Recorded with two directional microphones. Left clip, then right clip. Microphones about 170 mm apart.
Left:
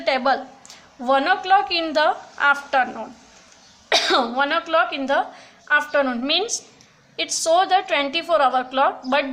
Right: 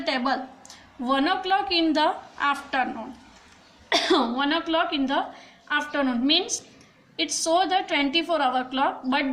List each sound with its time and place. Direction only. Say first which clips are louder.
0.0 s a woman's voice: left 6 dB; 45° left (ahead or behind)